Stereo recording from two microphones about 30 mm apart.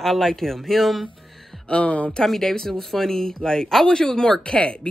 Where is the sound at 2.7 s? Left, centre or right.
Centre.